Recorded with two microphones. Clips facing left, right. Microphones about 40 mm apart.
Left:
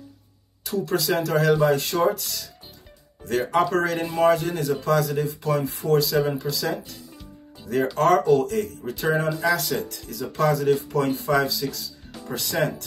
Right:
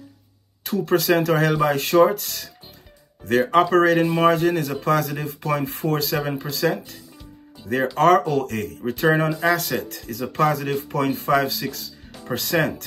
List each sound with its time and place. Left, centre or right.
0.7 s a man's voice: right